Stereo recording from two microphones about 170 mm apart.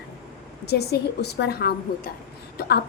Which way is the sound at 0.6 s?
70° left (ahead or behind).